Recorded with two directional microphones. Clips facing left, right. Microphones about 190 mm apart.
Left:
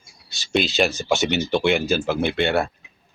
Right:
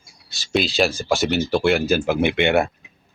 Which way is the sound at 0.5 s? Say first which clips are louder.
Right 1 dB; centre (ahead or behind).